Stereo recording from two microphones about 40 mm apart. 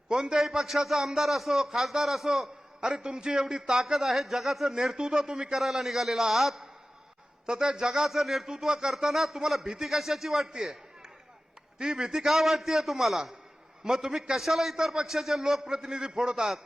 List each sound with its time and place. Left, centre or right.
0.1 s speech: centre
5.6 s speech: centre
7.4 s speech: centre
8.1 s speech: centre
10.5 s a sound: centre
11.8 s speech: centre
12.3 s a man's voice: centre
15.6 s speech: centre